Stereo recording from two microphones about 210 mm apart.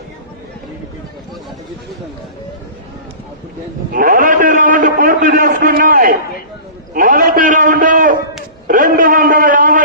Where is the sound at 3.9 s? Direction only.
40° right (ahead or behind).